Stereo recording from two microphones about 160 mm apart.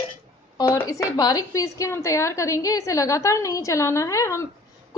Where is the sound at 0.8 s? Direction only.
20° left (ahead or behind).